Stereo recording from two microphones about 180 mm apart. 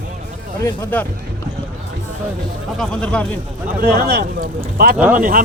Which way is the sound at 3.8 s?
55° right (ahead or behind).